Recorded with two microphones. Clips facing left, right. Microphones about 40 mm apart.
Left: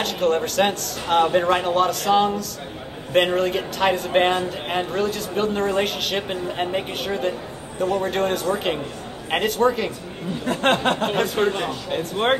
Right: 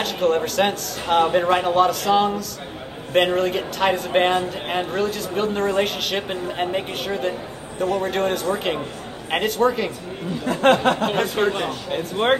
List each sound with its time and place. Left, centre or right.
0.0 s speech: centre
10.4 s a sound: left
11.1 s speech: centre